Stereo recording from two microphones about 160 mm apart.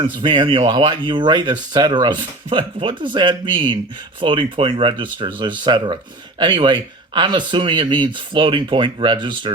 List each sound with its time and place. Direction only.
0.0 s speech: 30° right (ahead or behind)